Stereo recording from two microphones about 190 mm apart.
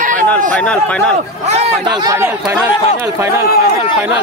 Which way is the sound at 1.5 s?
35° right (ahead or behind).